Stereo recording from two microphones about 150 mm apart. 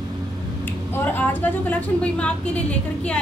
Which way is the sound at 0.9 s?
10° left (ahead or behind).